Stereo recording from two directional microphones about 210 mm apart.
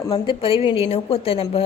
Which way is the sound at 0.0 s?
20° left (ahead or behind).